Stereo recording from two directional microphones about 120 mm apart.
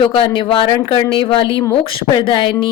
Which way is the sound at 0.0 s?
45° left (ahead or behind).